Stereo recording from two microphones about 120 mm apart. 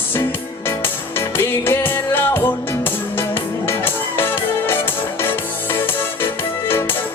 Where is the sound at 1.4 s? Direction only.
20° left (ahead or behind).